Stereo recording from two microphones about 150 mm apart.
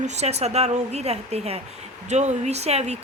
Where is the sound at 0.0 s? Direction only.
50° right (ahead or behind).